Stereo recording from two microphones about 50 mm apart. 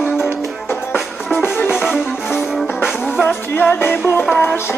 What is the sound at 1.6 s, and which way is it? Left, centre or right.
Music, centre.